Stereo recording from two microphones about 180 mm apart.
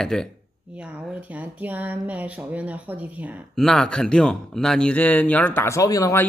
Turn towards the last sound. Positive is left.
turn(degrees=20)  # may be behind; listen again after turning